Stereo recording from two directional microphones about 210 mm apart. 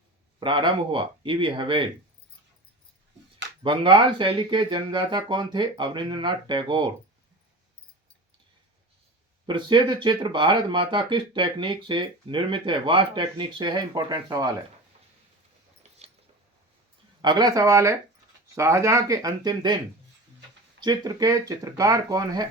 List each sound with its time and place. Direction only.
0.3 s speech: 25° right (ahead or behind)
3.6 s speech: 25° right (ahead or behind)
9.5 s speech: 20° right (ahead or behind)
17.2 s speech: 20° right (ahead or behind)
20.8 s speech: 20° right (ahead or behind)